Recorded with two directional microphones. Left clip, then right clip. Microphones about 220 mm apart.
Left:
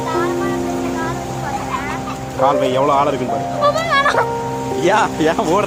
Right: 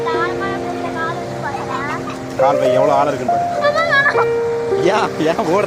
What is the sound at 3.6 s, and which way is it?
Music, 30° left (ahead or behind).